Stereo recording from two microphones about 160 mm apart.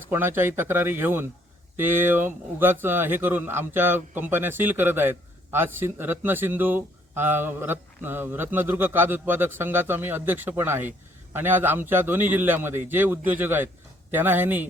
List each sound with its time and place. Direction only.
0.1 s speech: 15° right (ahead or behind)